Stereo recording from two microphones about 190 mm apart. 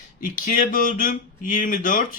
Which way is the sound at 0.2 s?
45° left (ahead or behind).